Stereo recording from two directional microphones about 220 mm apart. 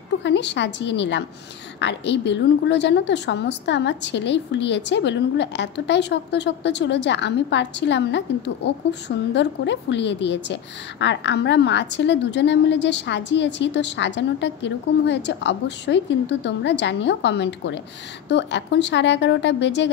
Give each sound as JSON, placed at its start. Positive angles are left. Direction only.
{"t": 0.2, "sound": "a woman's voice", "side_deg": 55}
{"t": 9.3, "sound": "a woman's voice", "side_deg": 55}